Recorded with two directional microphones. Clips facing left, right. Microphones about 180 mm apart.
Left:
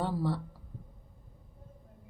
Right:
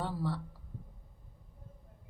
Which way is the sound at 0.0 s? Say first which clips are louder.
Left 4 dB; 25° left (ahead or behind).